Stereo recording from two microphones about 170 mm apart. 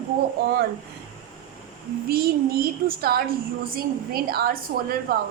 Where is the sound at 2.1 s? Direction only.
60° right (ahead or behind).